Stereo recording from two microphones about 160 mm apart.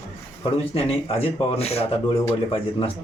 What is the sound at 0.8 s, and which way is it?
Speech, 35° left (ahead or behind).